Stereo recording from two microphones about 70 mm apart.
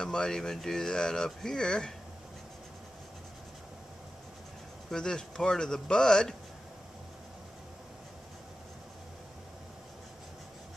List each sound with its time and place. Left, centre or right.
0.0 s speech: centre
4.9 s speech: centre